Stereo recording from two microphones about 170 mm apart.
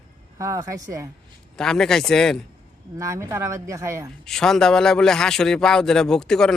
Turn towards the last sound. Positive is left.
turn(degrees=5)  # may be behind; listen again after turning